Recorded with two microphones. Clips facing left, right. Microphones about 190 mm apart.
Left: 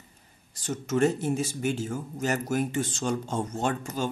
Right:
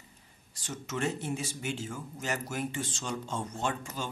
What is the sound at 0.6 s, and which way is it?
A man's voice, 45° left (ahead or behind).